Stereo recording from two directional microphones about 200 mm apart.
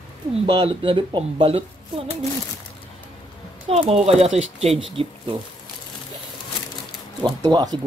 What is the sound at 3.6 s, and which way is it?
Speech, 30° right (ahead or behind).